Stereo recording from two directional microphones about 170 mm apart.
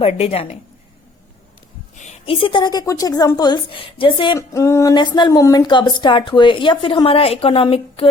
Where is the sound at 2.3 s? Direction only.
30° left (ahead or behind).